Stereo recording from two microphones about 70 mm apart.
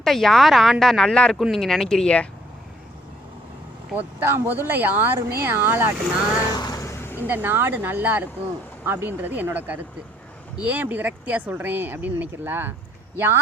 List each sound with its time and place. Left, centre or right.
0.0 s speech: centre
4.2 s speech: right
6.5 s vehicle: left
6.8 s vehicle: left
7.3 s speech: right